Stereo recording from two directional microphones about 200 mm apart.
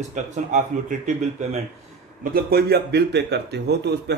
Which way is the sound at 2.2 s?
50° right (ahead or behind).